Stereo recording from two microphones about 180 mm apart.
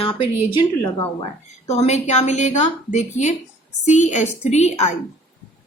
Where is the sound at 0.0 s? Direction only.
30° left (ahead or behind).